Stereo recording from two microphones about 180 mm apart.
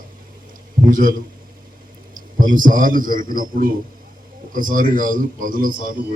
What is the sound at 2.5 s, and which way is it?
A man's voice, 50° right (ahead or behind).